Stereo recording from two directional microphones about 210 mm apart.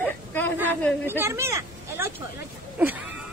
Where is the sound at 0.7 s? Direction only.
10° left (ahead or behind).